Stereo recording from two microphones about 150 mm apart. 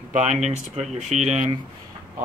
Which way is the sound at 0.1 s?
50° right (ahead or behind).